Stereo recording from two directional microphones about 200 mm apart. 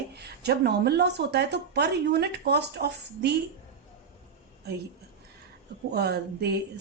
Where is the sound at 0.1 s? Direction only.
55° right (ahead or behind).